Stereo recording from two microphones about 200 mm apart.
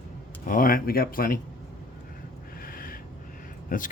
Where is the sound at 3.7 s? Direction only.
45° left (ahead or behind).